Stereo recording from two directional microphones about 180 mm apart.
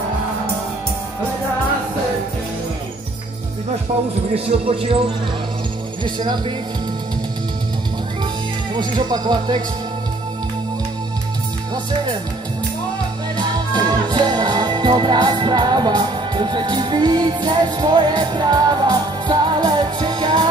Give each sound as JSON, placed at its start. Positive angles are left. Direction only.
{"t": 4.5, "sound": "speech", "side_deg": -30}
{"t": 6.0, "sound": "music", "side_deg": -25}
{"t": 8.7, "sound": "music", "side_deg": -25}
{"t": 13.4, "sound": "music", "side_deg": -25}